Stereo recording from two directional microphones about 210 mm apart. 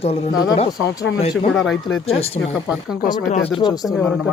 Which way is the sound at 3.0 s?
35° left (ahead or behind).